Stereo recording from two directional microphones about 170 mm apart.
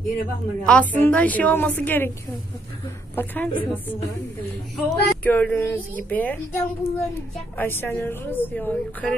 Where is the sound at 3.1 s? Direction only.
10° left (ahead or behind).